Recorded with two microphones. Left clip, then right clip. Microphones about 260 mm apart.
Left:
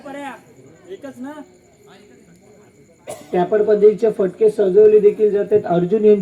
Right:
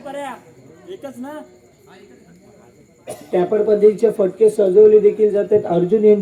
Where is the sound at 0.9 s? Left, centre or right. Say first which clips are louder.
Right 1 dB; right.